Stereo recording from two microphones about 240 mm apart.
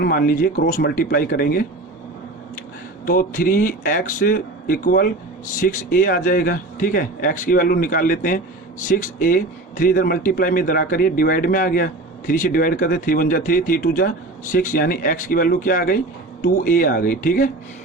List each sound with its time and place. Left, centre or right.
0.0 s a man's voice: left
3.1 s a man's voice: left